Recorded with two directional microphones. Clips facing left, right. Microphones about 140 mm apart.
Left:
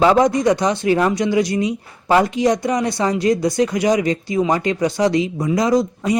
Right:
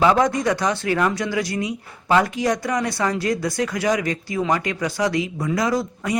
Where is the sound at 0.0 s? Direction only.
20° left (ahead or behind).